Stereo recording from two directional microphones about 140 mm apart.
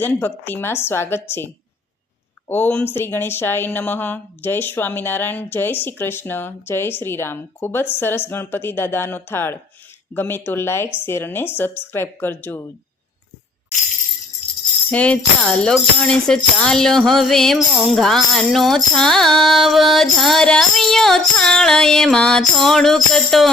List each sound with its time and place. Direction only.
0.0 s a woman's voice: 15° left (ahead or behind)
2.5 s a woman's voice: 10° left (ahead or behind)
14.8 s music: 10° left (ahead or behind)